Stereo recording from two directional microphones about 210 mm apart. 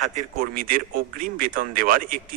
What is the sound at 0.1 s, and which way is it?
Speech, 40° right (ahead or behind).